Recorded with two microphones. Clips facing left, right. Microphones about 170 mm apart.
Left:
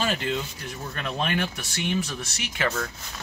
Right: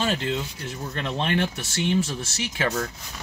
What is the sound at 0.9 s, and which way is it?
Speech, 25° right (ahead or behind).